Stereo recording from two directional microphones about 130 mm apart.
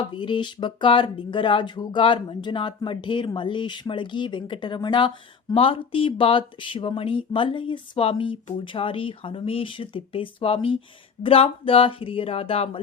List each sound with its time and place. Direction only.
0.0 s speech: 40° left (ahead or behind)